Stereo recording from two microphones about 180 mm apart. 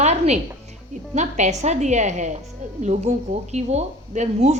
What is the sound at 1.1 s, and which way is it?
Speech, 40° right (ahead or behind).